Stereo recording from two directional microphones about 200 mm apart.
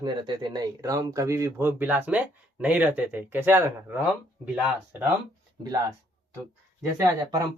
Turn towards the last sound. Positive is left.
turn(degrees=-20)  # may be behind; listen again after turning